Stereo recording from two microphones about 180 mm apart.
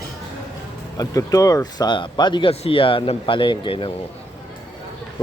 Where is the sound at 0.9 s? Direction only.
20° left (ahead or behind).